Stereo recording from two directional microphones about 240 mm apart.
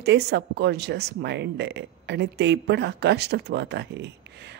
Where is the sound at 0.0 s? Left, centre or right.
Right.